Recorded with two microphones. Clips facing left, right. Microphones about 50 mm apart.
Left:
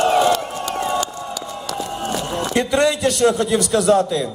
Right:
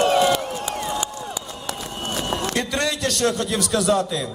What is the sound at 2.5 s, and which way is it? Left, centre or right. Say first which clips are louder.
A man's voice: left 7 dB; left.